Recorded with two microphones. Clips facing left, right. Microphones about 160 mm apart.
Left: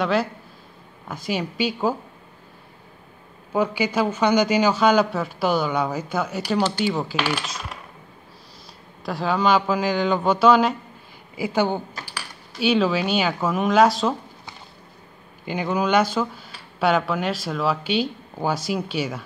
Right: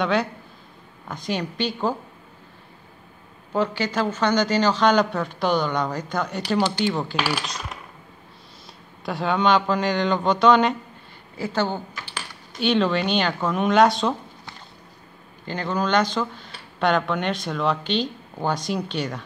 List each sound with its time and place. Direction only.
0.0 s a man's voice: centre (ahead or behind)
3.5 s a man's voice: 10° left (ahead or behind)
9.0 s a man's voice: centre (ahead or behind)
15.4 s speech: 10° left (ahead or behind)